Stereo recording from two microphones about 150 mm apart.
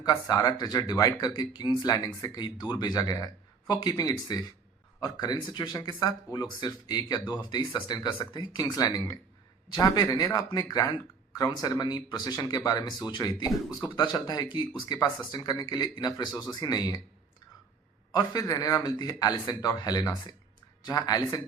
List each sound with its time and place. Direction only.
0.0 s speech: 25° left (ahead or behind)
18.1 s speech: 25° left (ahead or behind)